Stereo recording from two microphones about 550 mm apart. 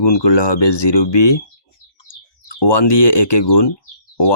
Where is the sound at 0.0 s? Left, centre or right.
Left.